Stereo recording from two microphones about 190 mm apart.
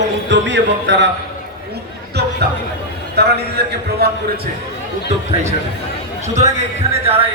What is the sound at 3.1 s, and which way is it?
Speech, 60° right (ahead or behind).